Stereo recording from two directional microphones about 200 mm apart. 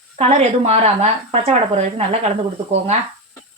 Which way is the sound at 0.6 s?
30° right (ahead or behind).